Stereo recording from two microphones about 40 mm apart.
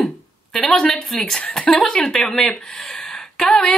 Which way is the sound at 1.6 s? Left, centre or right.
Left.